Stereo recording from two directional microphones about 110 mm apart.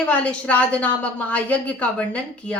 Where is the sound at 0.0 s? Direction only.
15° left (ahead or behind).